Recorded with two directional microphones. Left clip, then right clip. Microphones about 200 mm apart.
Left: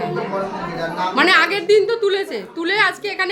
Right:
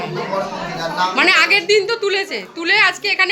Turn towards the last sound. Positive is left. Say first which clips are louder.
# right 3 dB
turn(degrees=10)  # may be behind; listen again after turning